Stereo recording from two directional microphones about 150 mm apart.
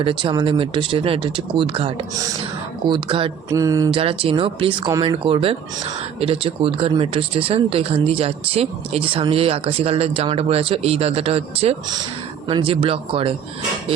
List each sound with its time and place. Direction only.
0.0 s speech: 35° right (ahead or behind)
3.5 s a sound: 20° right (ahead or behind)
3.9 s speech: 40° right (ahead or behind)